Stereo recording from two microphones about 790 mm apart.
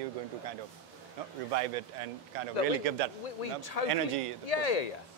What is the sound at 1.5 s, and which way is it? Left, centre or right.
Speech, right.